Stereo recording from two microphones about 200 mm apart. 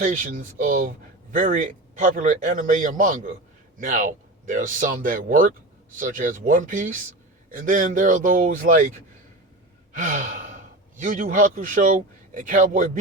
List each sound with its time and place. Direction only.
0.0 s speech: 40° right (ahead or behind)
10.0 s speech: 40° right (ahead or behind)